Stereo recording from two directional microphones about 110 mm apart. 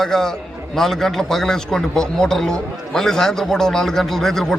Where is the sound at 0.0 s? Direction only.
5° left (ahead or behind).